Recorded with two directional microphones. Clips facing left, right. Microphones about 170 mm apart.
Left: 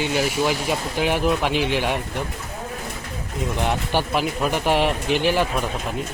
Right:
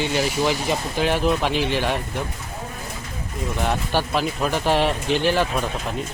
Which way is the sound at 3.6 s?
15° left (ahead or behind).